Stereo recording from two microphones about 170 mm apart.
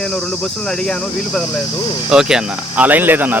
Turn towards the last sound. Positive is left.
turn(degrees=-10)  # may be behind; listen again after turning